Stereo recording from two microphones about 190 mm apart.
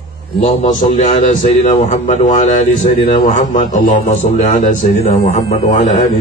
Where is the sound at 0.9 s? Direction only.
40° left (ahead or behind).